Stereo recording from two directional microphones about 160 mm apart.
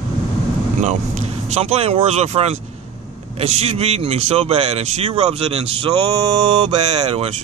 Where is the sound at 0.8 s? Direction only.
45° right (ahead or behind).